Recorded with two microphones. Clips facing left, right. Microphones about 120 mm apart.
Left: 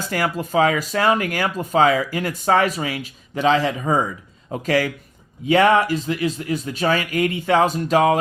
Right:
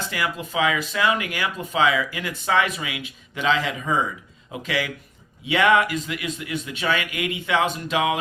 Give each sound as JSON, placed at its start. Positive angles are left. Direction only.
{"t": 0.1, "sound": "speech", "side_deg": 45}